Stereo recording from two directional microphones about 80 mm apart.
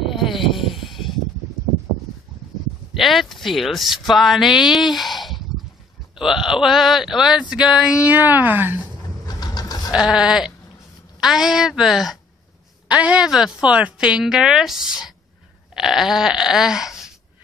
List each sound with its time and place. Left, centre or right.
0.0 s a sound: centre
2.9 s speech: centre; by 8.8 s right
9.2 s vehicle: left
9.9 s speech: centre
12.8 s a woman's voice: centre
15.7 s a sound: centre